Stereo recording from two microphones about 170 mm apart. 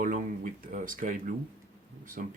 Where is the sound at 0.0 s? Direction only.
50° right (ahead or behind).